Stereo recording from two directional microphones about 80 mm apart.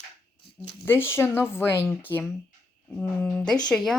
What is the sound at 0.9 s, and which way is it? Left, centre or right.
Speech, left.